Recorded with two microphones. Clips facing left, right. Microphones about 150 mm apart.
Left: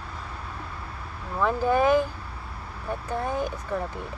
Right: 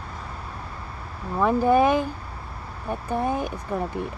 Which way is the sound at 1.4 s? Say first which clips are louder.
Right 4 dB; 15° right (ahead or behind).